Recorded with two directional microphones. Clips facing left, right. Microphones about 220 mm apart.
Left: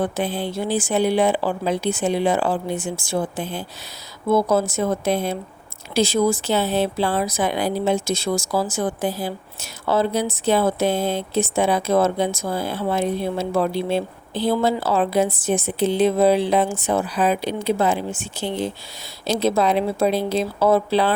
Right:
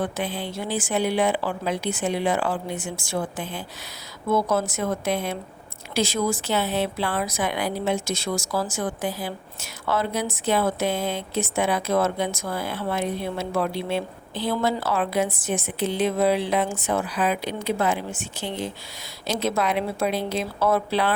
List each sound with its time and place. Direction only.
0.0 s speech: 35° left (ahead or behind)
6.5 s speech: 30° left (ahead or behind)
19.3 s speech: 30° left (ahead or behind)